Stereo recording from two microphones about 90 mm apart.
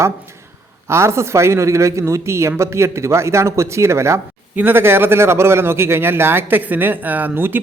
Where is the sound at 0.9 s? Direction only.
30° right (ahead or behind).